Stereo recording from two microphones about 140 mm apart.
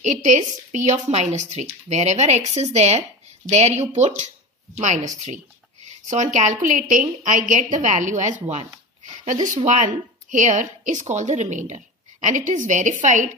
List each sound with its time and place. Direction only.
0.0 s a woman's voice: 60° right (ahead or behind)